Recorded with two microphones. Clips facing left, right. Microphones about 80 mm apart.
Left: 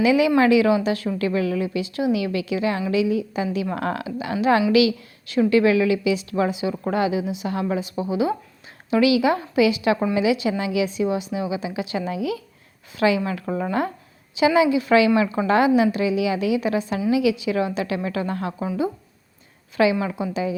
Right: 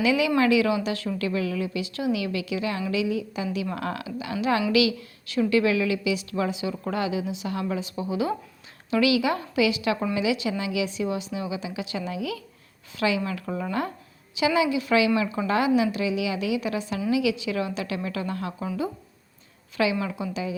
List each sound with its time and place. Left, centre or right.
0.0 s a woman's voice: left
19.7 s a woman's voice: left